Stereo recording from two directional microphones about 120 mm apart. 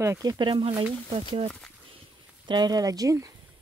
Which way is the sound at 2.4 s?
35° right (ahead or behind).